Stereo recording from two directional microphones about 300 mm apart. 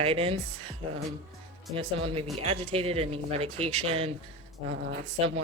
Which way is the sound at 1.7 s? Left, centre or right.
Centre.